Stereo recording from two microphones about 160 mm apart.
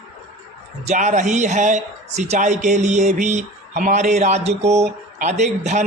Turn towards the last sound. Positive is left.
turn(degrees=-45)  # may be behind; listen again after turning